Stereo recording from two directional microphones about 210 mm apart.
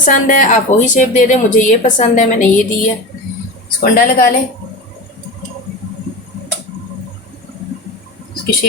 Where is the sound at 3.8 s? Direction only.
45° left (ahead or behind).